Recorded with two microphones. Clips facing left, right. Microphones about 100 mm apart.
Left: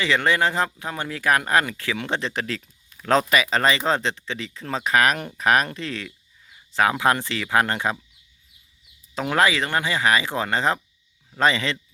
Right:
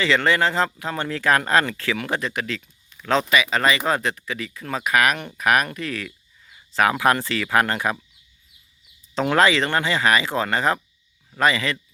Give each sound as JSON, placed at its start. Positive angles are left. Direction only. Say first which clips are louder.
{"t": 0.0, "sound": "speech", "louder": "right 1 dB", "side_deg": 15}
{"t": 9.1, "sound": "speech", "louder": "right 3 dB", "side_deg": 10}